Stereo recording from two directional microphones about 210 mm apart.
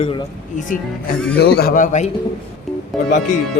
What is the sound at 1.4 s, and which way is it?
Speech, 50° left (ahead or behind).